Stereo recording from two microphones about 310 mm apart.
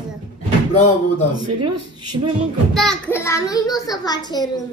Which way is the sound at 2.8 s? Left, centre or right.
Centre.